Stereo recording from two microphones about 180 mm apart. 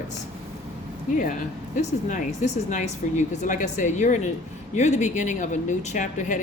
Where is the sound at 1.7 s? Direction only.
45° left (ahead or behind).